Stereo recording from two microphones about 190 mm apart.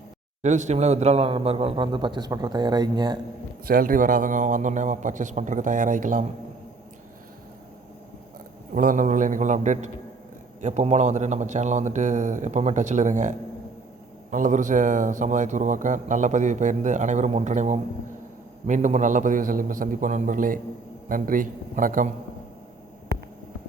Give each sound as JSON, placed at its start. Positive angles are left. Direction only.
{"t": 0.4, "sound": "a man's voice", "side_deg": -40}
{"t": 3.7, "sound": "a man's voice", "side_deg": -50}
{"t": 8.7, "sound": "a man's voice", "side_deg": -45}